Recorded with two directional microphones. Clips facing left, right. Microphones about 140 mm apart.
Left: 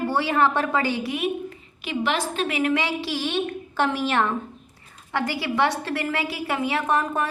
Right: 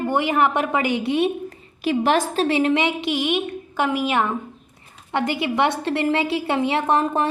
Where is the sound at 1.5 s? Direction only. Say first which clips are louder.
Right 8 dB; 40° right (ahead or behind).